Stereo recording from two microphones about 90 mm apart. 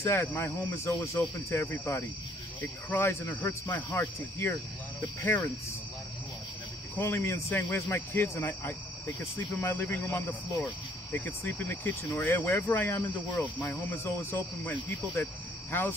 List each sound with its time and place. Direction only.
0.0 s speech: 25° left (ahead or behind)
0.8 s speech: 30° left (ahead or behind)
2.6 s speech: 20° left (ahead or behind)
7.0 s speech: 30° left (ahead or behind)